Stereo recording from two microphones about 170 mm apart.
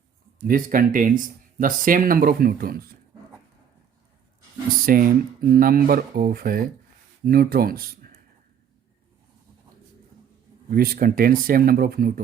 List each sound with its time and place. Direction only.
0.4 s speech: 55° right (ahead or behind)
4.9 s speech: 60° right (ahead or behind)
10.7 s speech: 60° right (ahead or behind)